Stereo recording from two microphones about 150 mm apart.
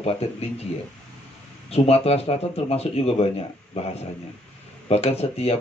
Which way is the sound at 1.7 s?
45° left (ahead or behind).